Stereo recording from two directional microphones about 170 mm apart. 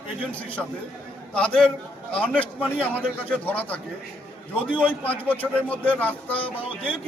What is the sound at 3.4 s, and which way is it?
Speech, 10° left (ahead or behind).